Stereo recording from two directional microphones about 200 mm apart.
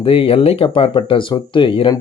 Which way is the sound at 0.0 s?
25° left (ahead or behind).